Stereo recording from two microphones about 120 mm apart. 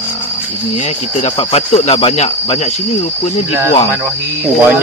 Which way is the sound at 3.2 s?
55° left (ahead or behind).